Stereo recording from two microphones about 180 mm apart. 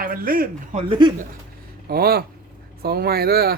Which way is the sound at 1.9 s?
60° right (ahead or behind).